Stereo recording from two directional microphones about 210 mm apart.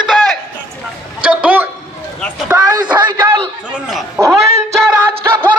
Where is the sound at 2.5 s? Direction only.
20° right (ahead or behind).